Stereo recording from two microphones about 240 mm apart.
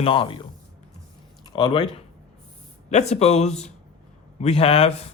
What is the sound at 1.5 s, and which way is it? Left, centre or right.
Speech, centre.